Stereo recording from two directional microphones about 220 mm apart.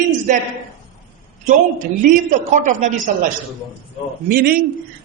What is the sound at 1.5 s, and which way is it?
A man's voice, 35° right (ahead or behind).